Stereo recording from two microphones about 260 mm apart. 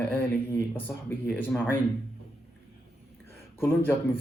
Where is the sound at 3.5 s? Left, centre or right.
Centre.